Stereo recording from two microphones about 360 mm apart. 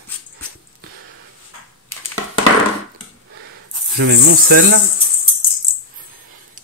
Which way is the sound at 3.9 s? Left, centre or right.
Right.